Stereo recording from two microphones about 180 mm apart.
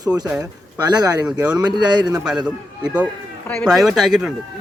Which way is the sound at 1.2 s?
5° right (ahead or behind).